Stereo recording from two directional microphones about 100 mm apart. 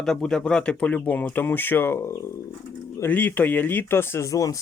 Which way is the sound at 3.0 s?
20° left (ahead or behind).